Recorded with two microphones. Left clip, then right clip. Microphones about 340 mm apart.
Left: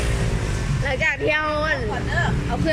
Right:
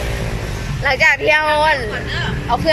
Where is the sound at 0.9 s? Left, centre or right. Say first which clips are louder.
Right 8 dB; centre.